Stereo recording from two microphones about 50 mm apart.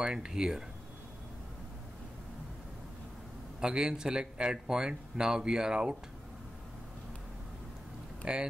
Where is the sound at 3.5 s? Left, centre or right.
Centre.